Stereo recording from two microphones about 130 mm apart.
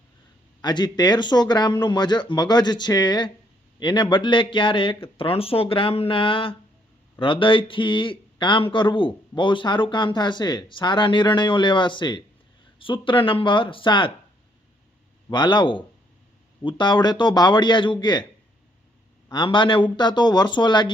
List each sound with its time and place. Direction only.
0.6 s speech: 35° left (ahead or behind)
15.3 s speech: 35° left (ahead or behind)
19.3 s speech: 40° left (ahead or behind)